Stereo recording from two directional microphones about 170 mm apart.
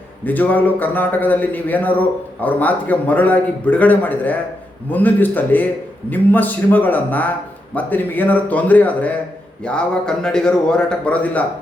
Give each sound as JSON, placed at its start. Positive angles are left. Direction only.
{"t": 0.3, "sound": "a man's voice", "side_deg": 10}